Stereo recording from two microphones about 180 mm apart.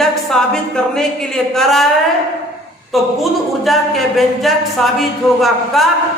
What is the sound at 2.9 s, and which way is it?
Speech, centre (ahead or behind).